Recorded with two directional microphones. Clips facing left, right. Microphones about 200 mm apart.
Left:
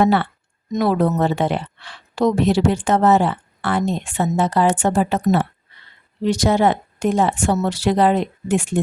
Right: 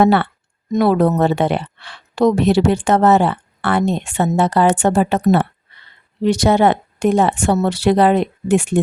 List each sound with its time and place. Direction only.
0.0 s a woman's voice: 65° right (ahead or behind)